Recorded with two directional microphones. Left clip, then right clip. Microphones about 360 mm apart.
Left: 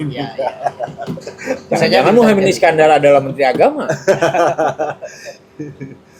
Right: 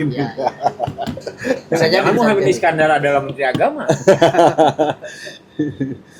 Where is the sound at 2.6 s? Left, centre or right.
Left.